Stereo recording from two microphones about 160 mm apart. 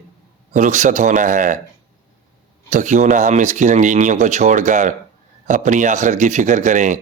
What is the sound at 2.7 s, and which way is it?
Speech, 50° right (ahead or behind).